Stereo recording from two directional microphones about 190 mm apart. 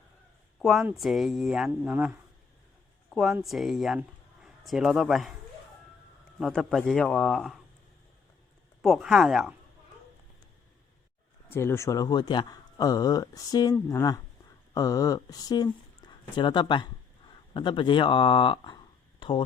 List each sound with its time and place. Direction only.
0.6 s speech: centre (ahead or behind)
3.2 s a man's voice: centre (ahead or behind)
6.4 s speech: centre (ahead or behind)
8.8 s speech: centre (ahead or behind)
11.4 s speech: 10° left (ahead or behind)